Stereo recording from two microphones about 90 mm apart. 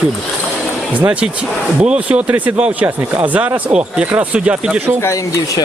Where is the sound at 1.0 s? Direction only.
15° right (ahead or behind).